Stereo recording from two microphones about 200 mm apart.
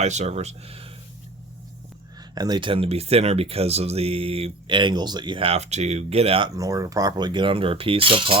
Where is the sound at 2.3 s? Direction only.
20° right (ahead or behind).